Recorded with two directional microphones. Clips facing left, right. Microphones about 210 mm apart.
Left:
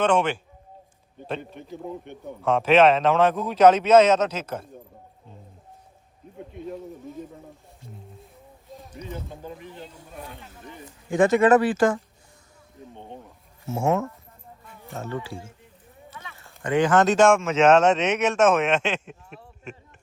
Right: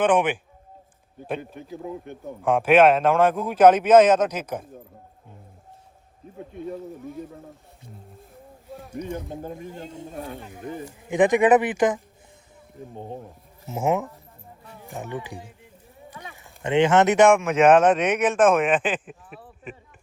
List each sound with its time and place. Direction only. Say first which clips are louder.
0.0 s speech: right 1 dB; 15° right (ahead or behind)
6.7 s speech: right 2 dB; centre (ahead or behind)
8.7 s a sound: right 7 dB; 10° right (ahead or behind)
9.4 s speech: right 4 dB; 45° right (ahead or behind)
11.1 s speech: even; 15° right (ahead or behind)
12.9 s speech: right 6 dB; 40° right (ahead or behind)
13.7 s speech: even; 15° right (ahead or behind)
18.8 s speech: right 1 dB; centre (ahead or behind)